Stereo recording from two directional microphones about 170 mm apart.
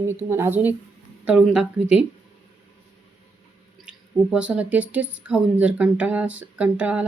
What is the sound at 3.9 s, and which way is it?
Speech, 5° right (ahead or behind).